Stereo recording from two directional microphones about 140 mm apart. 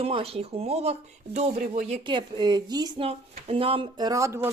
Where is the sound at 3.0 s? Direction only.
45° right (ahead or behind); by 4.4 s 25° right (ahead or behind).